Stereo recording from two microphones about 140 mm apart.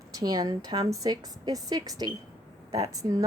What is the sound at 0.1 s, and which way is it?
A woman's voice, 30° right (ahead or behind).